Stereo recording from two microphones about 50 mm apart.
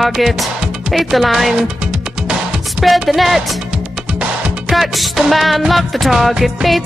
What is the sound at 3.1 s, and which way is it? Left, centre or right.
Music, centre.